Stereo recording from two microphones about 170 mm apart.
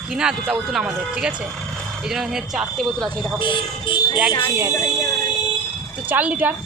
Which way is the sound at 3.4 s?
30° left (ahead or behind).